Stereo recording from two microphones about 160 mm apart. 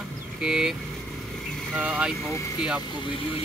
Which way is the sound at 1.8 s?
5° right (ahead or behind).